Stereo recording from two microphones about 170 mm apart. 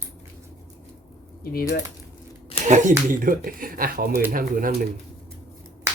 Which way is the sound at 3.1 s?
55° right (ahead or behind).